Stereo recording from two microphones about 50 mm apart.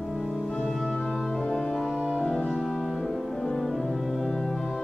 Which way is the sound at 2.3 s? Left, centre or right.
Centre.